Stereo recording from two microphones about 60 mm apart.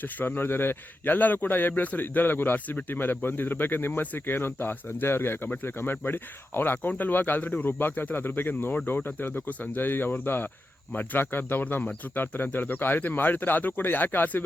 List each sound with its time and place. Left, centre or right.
0.0 s speech: left